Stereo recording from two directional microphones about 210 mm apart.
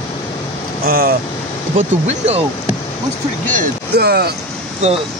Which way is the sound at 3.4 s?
45° right (ahead or behind).